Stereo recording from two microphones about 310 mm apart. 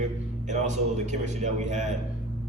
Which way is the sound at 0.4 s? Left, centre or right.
Right.